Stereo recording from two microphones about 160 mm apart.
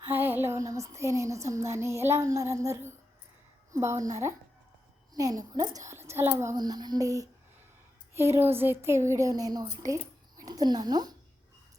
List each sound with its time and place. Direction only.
0.0 s a woman's voice: 10° right (ahead or behind)